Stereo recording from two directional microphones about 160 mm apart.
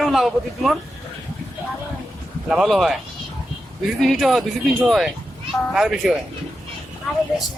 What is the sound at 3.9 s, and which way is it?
Speech, centre (ahead or behind).